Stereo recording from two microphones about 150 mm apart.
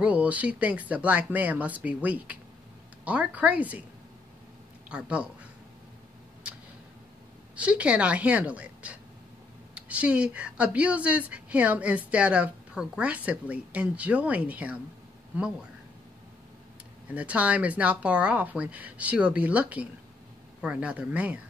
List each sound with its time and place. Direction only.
0.0 s a woman's voice: 10° right (ahead or behind)
4.8 s speech: 5° right (ahead or behind)
7.5 s a woman's voice: 10° right (ahead or behind)
17.1 s a woman's voice: 10° right (ahead or behind)